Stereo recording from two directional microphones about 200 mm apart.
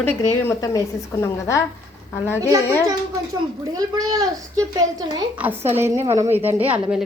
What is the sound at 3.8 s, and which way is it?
Speech, 20° right (ahead or behind).